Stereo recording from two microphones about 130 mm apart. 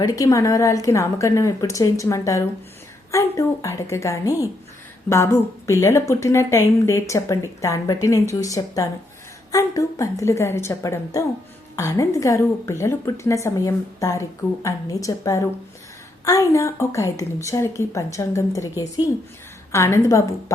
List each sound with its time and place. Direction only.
0.0 s speech: 25° left (ahead or behind)